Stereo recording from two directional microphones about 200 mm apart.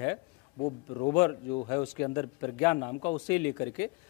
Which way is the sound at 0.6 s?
25° left (ahead or behind).